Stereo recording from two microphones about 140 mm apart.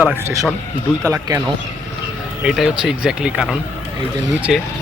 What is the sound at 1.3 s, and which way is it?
Speech, 30° right (ahead or behind).